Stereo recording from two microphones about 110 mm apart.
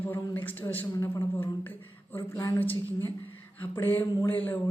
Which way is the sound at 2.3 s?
30° left (ahead or behind).